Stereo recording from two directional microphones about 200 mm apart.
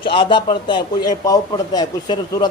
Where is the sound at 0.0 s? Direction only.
25° left (ahead or behind).